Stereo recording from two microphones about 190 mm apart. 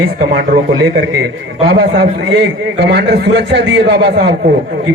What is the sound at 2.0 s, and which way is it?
A man's voice, 60° right (ahead or behind).